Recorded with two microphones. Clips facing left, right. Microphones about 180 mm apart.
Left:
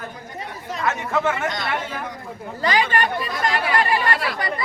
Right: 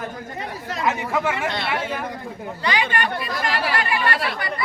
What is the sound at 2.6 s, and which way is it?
Speech, 40° left (ahead or behind).